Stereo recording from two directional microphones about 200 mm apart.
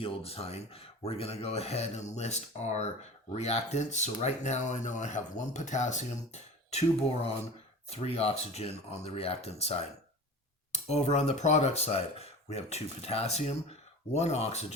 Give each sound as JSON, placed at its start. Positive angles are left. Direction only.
{"t": 0.0, "sound": "speech", "side_deg": 30}